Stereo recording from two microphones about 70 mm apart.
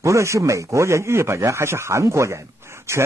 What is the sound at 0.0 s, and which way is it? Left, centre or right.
Speech, right.